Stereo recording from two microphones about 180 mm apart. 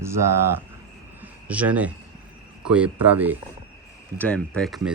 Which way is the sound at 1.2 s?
10° right (ahead or behind).